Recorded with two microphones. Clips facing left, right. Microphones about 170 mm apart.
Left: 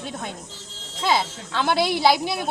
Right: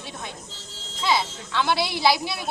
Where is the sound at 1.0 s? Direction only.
50° left (ahead or behind).